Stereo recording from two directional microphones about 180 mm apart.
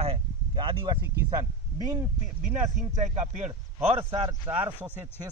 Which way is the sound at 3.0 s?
40° right (ahead or behind).